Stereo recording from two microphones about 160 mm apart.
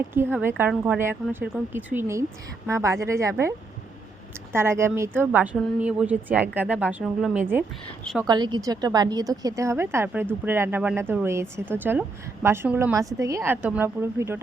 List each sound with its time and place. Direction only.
0.1 s a woman's voice: 15° right (ahead or behind)
4.5 s a woman's voice: 15° right (ahead or behind)
8.3 s a woman's voice: 25° right (ahead or behind)